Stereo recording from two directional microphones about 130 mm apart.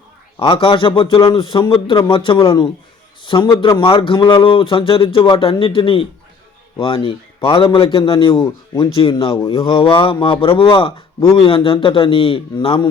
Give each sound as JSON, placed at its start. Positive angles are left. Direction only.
{"t": 0.3, "sound": "a man's voice", "side_deg": 45}